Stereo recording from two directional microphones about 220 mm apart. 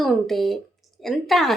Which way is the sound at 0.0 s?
Centre (ahead or behind).